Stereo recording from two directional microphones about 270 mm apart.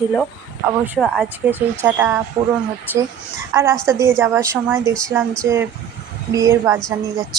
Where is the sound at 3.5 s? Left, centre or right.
Centre.